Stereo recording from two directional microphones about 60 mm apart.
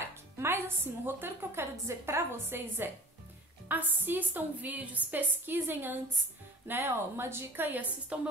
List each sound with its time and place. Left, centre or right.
0.4 s a woman's voice: right